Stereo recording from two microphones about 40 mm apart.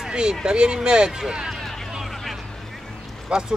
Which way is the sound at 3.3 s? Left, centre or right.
Centre.